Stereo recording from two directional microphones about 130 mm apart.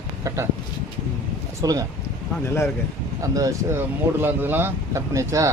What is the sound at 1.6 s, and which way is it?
Speech, 25° right (ahead or behind).